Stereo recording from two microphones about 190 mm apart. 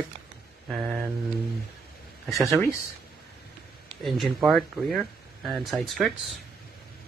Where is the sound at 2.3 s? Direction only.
Centre (ahead or behind).